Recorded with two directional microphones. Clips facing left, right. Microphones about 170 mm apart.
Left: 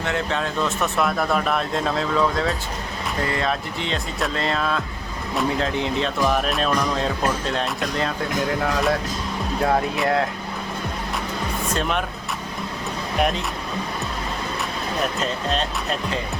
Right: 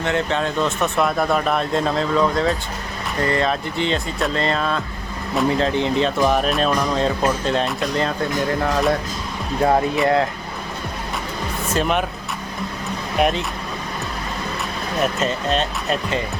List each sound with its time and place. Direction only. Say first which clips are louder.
0.0 s speech: right 3 dB; centre (ahead or behind)
11.7 s speech: right 5 dB; 5° right (ahead or behind)
13.1 s speech: right 3 dB; centre (ahead or behind)
15.0 s speech: right 5 dB; 5° right (ahead or behind)